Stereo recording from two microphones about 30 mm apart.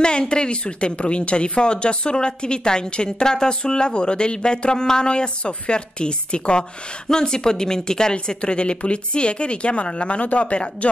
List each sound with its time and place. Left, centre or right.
0.0 s speech: left